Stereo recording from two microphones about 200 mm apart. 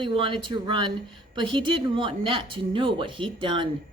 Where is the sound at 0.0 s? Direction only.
25° right (ahead or behind).